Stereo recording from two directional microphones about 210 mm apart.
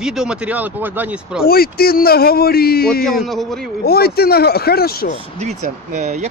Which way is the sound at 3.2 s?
Centre (ahead or behind).